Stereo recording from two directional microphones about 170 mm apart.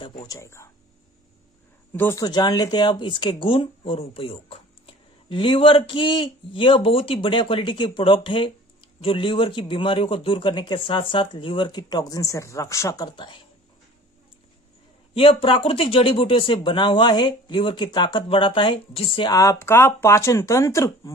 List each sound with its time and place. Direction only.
0.0 s a man's voice: 25° left (ahead or behind)
1.9 s a man's voice: 15° left (ahead or behind)
15.1 s speech: 35° left (ahead or behind)
19.3 s speech: 20° left (ahead or behind)